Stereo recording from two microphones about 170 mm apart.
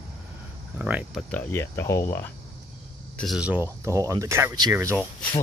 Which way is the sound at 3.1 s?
Centre (ahead or behind).